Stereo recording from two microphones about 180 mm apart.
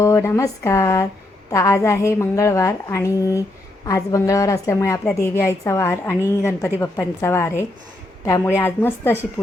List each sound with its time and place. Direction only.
0.0 s a woman's voice: 15° left (ahead or behind)